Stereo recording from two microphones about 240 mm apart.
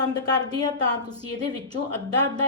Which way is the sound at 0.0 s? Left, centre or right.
Centre.